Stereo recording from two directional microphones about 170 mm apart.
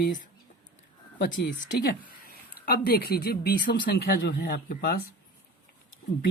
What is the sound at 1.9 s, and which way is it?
Speech, 65° left (ahead or behind).